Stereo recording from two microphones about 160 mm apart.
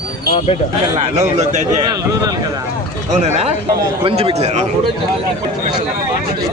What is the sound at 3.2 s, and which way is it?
A man's voice, 45° right (ahead or behind).